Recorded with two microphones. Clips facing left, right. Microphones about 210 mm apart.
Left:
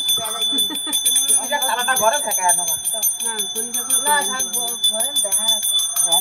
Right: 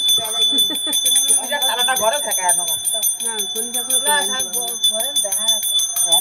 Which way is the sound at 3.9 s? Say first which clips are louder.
Even; 30° right (ahead or behind).